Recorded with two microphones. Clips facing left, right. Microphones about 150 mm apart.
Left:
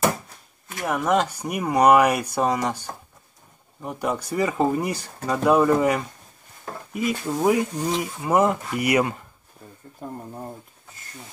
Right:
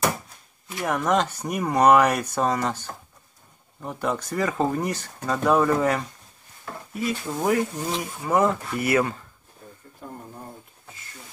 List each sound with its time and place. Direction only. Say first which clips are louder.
0.8 s speech: left 1 dB; 5° left (ahead or behind)
10.0 s speech: left 4 dB; 40° left (ahead or behind)